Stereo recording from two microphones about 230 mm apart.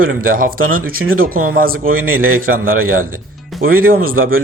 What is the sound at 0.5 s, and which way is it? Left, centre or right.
Speech, right.